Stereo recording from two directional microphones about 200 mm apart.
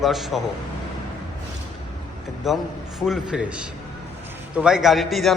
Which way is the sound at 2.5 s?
Centre (ahead or behind).